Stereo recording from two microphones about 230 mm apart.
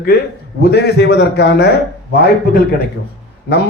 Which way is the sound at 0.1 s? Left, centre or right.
Left.